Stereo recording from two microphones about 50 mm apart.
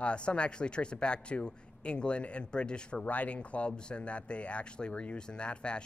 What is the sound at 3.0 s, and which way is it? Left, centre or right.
A man's voice, left.